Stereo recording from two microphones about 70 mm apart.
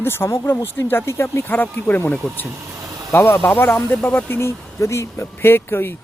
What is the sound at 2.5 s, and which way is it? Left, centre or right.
Vehicle, right.